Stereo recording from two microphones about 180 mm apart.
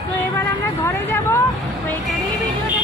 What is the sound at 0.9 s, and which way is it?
Vehicle, 15° left (ahead or behind).